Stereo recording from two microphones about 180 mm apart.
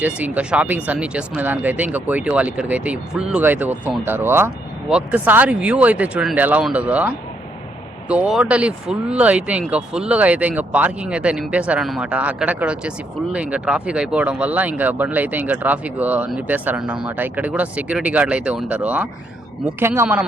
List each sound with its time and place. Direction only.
0.0 s speech: 5° right (ahead or behind)